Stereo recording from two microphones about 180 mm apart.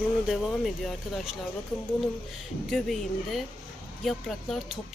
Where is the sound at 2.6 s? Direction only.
Centre (ahead or behind).